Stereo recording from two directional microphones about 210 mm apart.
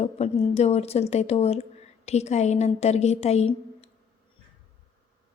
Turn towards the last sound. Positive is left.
turn(degrees=30)  # may be behind; listen again after turning